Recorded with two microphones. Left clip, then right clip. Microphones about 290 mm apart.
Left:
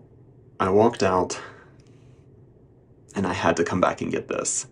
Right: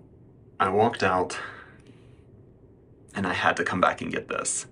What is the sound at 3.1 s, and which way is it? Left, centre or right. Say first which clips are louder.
Speech: left 1 dB; left.